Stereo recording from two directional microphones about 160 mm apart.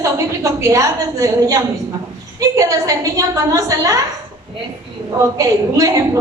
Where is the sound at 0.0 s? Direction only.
20° right (ahead or behind).